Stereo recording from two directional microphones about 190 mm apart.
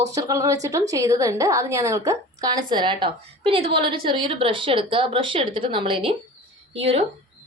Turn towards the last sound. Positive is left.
turn(degrees=-30)  # may be behind; listen again after turning